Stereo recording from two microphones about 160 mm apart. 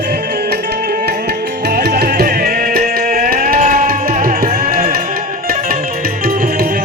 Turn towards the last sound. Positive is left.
turn(degrees=-65)  # may be behind; listen again after turning